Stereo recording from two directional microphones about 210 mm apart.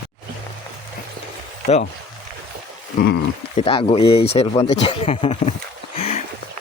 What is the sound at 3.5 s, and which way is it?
Speech, 25° left (ahead or behind).